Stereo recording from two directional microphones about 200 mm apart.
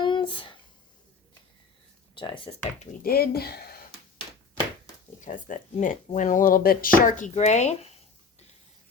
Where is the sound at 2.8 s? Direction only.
45° left (ahead or behind).